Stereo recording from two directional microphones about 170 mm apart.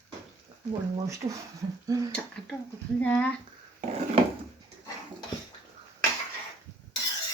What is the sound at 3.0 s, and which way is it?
Speech, 10° left (ahead or behind).